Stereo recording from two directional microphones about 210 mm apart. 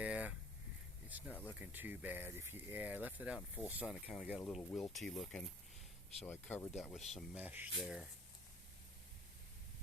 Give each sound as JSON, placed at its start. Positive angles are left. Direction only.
{"t": 0.0, "sound": "a sound", "side_deg": -5}
{"t": 1.3, "sound": "speech", "side_deg": 10}
{"t": 1.5, "sound": "speech", "side_deg": -10}
{"t": 6.7, "sound": "speech", "side_deg": 0}